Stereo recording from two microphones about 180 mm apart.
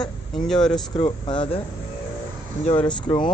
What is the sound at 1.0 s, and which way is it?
Speech, 30° left (ahead or behind).